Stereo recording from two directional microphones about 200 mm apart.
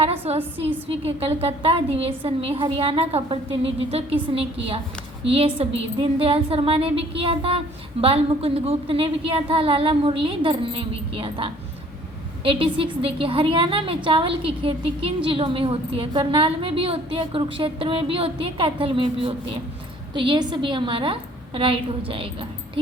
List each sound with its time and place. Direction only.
0.0 s a woman's voice: 30° right (ahead or behind)